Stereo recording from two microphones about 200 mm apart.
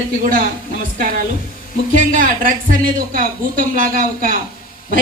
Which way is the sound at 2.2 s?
45° right (ahead or behind).